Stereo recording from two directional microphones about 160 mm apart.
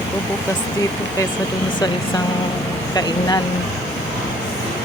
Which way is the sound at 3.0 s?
25° left (ahead or behind).